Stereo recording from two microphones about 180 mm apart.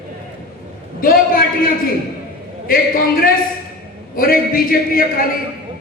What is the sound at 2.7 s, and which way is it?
Speech, 55° left (ahead or behind).